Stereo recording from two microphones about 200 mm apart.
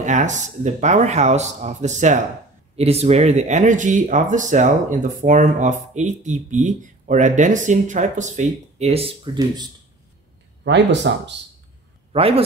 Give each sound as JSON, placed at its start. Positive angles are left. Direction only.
{"t": 0.0, "sound": "speech", "side_deg": -35}
{"t": 10.6, "sound": "speech", "side_deg": -60}
{"t": 12.1, "sound": "a man's voice", "side_deg": -30}